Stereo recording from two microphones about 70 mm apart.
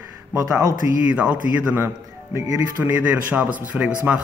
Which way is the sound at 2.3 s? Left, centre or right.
Right.